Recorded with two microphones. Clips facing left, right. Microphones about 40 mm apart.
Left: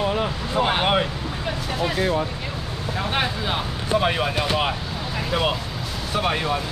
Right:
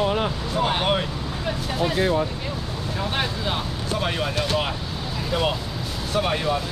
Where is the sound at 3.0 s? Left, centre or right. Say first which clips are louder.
Left 2 dB; centre.